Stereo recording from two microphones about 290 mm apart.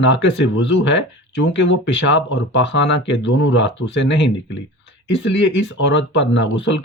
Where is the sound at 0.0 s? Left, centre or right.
Left.